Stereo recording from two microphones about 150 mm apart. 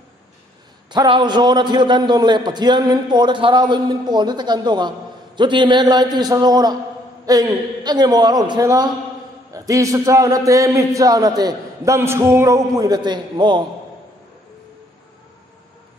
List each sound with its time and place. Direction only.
0.8 s a man's voice: 30° right (ahead or behind)